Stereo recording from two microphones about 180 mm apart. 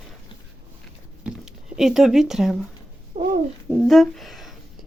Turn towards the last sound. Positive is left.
turn(degrees=0)  # may be behind; listen again after turning